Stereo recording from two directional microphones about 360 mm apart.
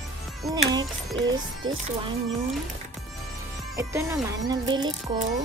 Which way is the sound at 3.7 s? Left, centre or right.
Centre.